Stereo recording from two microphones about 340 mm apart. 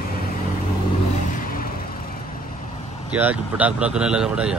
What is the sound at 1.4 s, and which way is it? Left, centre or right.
Vehicle, left.